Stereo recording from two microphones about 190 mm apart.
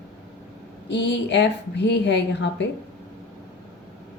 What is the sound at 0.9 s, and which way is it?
A woman's voice, 70° left (ahead or behind).